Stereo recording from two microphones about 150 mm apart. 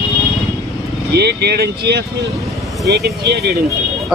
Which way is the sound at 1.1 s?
90° right.